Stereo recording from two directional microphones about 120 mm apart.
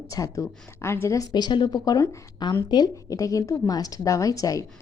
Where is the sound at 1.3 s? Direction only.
40° left (ahead or behind).